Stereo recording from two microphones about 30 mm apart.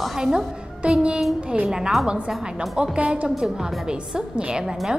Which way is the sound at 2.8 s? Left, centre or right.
Right.